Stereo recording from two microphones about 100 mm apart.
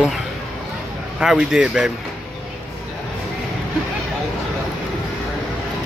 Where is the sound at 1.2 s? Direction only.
5° right (ahead or behind).